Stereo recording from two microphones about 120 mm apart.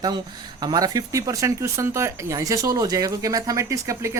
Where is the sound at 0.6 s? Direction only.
35° right (ahead or behind).